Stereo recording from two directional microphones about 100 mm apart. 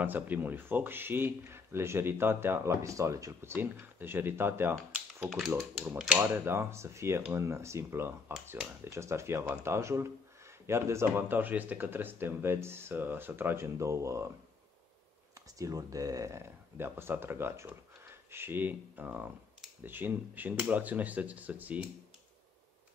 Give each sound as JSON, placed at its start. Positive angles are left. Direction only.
{"t": 0.0, "sound": "speech", "side_deg": -20}
{"t": 3.5, "sound": "speech", "side_deg": -20}
{"t": 5.6, "sound": "speech", "side_deg": -5}
{"t": 6.1, "sound": "speech", "side_deg": -25}
{"t": 15.3, "sound": "speech", "side_deg": -35}